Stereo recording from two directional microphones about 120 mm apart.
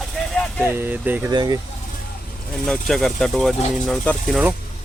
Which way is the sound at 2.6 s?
5° left (ahead or behind).